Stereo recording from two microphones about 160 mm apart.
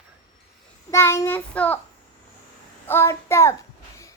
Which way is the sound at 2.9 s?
15° left (ahead or behind).